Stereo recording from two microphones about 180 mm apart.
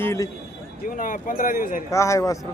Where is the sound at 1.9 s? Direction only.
15° left (ahead or behind).